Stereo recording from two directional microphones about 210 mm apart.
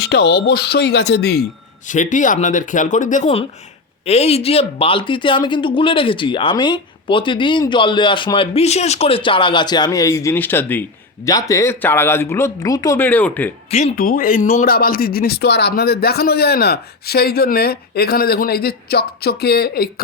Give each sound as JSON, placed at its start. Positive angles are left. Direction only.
{"t": 0.0, "sound": "a man's voice", "side_deg": 55}
{"t": 1.9, "sound": "speech", "side_deg": 35}
{"t": 13.7, "sound": "a man's voice", "side_deg": 35}